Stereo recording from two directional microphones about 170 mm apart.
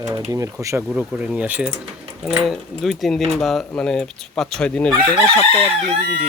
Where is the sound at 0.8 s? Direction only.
5° right (ahead or behind).